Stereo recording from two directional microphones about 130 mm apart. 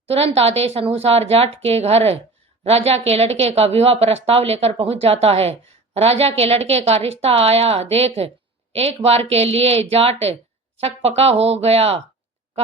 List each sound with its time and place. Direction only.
0.1 s a woman's voice: 50° right (ahead or behind)